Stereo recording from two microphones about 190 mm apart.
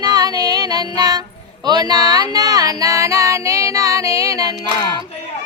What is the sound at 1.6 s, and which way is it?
Speech, 20° right (ahead or behind).